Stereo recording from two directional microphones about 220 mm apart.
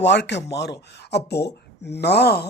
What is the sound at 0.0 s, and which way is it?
Speech, 50° left (ahead or behind).